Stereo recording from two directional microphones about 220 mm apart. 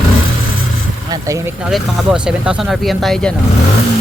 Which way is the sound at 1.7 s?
5° right (ahead or behind).